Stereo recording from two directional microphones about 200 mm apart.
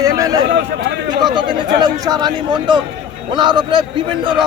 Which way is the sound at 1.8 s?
20° right (ahead or behind).